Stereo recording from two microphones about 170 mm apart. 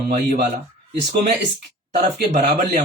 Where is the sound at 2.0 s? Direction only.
50° right (ahead or behind).